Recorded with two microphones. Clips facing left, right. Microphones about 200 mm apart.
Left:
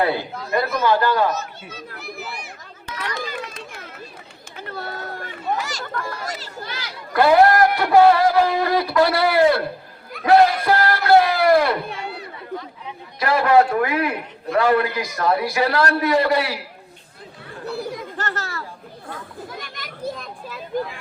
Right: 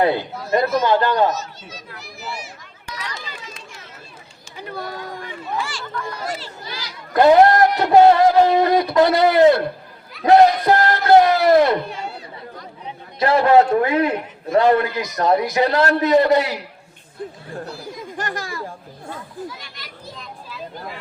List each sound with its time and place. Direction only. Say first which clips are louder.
0.0 s a man's voice: right 3 dB; 20° right (ahead or behind)
1.3 s speech: right 1 dB; 55° left (ahead or behind)
3.0 s a sound: left 8 dB; 60° left (ahead or behind)
4.5 s a sound: right 2 dB; 15° right (ahead or behind)
5.2 s speech: left 2 dB; 40° left (ahead or behind)
7.1 s a man's voice: right 2 dB; 20° right (ahead or behind)
11.9 s chatter: even; 65° left (ahead or behind)
13.1 s a man's voice: right 2 dB; 25° right (ahead or behind)
17.7 s speech: left 5 dB; 60° left (ahead or behind)
18.2 s speech: right 3 dB; 15° right (ahead or behind)
19.5 s children playing: left 2 dB; 50° left (ahead or behind)